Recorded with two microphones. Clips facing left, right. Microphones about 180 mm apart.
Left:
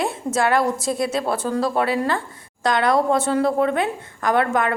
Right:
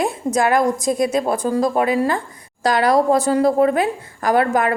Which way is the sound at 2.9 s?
Centre (ahead or behind).